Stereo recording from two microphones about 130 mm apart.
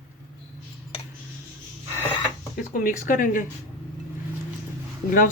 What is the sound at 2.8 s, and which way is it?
Speech, 90° left.